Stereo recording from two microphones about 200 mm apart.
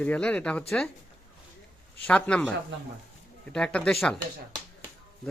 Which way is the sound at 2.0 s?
5° left (ahead or behind).